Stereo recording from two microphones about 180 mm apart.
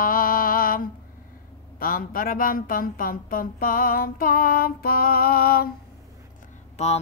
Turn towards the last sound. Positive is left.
turn(degrees=40)  # may be behind; listen again after turning